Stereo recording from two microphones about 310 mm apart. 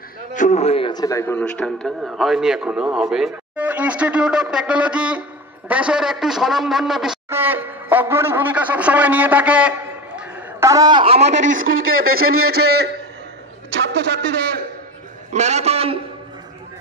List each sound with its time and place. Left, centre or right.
0.3 s a man's voice: left; by 11.3 s centre
11.3 s speech: right
15.3 s a man's voice: right